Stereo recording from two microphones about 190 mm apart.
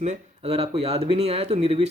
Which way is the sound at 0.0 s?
35° right (ahead or behind).